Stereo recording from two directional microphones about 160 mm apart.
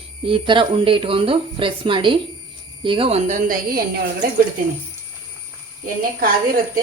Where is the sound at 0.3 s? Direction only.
30° right (ahead or behind); by 4.3 s 65° right (ahead or behind).